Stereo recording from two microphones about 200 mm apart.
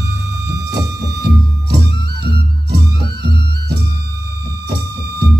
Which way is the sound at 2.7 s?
55° right (ahead or behind).